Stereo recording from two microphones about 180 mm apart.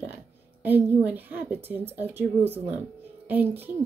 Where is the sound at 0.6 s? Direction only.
10° right (ahead or behind).